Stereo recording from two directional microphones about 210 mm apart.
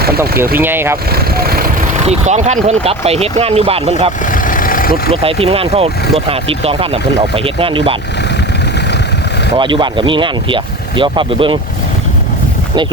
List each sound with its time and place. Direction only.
0.6 s speech: 10° right (ahead or behind)
1.1 s vehicle: 45° right (ahead or behind)
2.0 s speech: 35° right (ahead or behind)
4.3 s vehicle: 40° left (ahead or behind)
5.1 s speech: 25° right (ahead or behind)
9.6 s speech: 20° right (ahead or behind)